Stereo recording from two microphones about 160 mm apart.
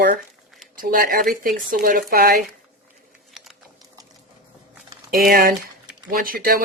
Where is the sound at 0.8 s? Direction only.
65° right (ahead or behind).